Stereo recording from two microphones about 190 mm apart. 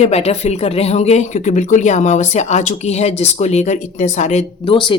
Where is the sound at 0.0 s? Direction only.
35° left (ahead or behind).